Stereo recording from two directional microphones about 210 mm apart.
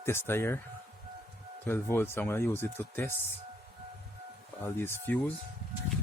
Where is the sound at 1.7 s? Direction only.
10° left (ahead or behind).